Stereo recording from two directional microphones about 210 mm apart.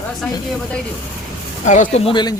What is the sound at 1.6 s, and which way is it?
Speech, 35° left (ahead or behind).